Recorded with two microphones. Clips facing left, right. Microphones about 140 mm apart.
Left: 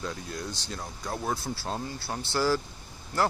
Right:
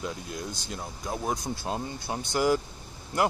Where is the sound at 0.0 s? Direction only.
10° right (ahead or behind).